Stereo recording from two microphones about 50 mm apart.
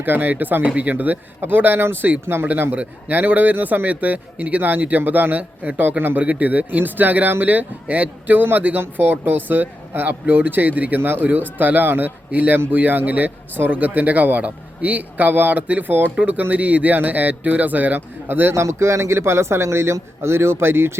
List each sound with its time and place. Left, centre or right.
0.0 s speech: right
2.5 s speech: right
6.2 s speech: right
18.5 s a man's voice: right